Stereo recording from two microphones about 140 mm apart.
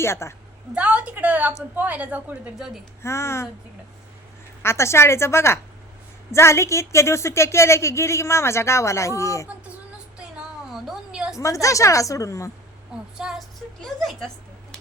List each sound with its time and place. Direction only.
0.0 s a woman's voice: 20° left (ahead or behind)
0.7 s a woman's voice: 10° right (ahead or behind)
3.0 s a woman's voice: 20° left (ahead or behind)
4.6 s a woman's voice: 20° left (ahead or behind)
10.2 s a sound: 5° right (ahead or behind)
11.3 s a woman's voice: 25° left (ahead or behind)
13.1 s a woman's voice: 5° right (ahead or behind)